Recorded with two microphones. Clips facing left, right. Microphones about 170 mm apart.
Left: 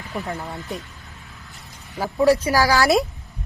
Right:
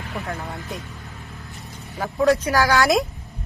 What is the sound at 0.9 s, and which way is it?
Vehicle, 40° right (ahead or behind).